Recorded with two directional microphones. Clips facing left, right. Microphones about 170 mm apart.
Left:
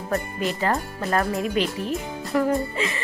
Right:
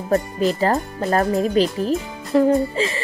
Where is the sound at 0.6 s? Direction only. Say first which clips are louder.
Right 5 dB; 35° right (ahead or behind).